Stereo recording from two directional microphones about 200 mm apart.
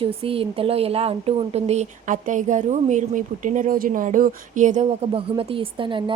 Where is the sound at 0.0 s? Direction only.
30° right (ahead or behind).